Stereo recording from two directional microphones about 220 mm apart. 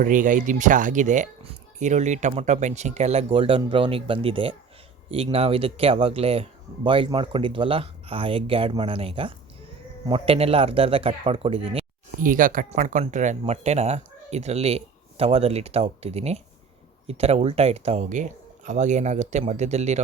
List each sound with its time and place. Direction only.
0.0 s speech: 35° right (ahead or behind)
12.2 s speech: 40° right (ahead or behind)